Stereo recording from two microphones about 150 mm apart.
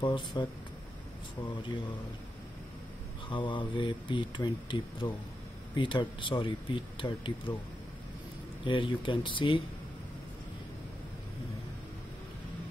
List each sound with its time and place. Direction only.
0.0 s speech: 30° left (ahead or behind)
3.3 s speech: 35° left (ahead or behind)
8.6 s speech: 35° left (ahead or behind)